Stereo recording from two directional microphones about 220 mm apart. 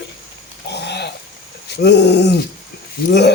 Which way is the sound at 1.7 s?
50° left (ahead or behind).